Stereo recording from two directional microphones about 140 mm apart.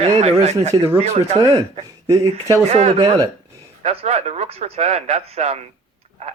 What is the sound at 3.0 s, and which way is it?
Speech, 25° right (ahead or behind).